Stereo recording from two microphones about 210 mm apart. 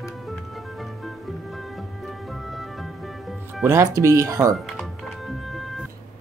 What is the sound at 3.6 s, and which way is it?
Speech, 15° right (ahead or behind).